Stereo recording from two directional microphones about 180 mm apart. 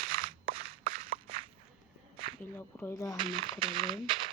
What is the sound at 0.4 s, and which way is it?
Walk, 30° right (ahead or behind).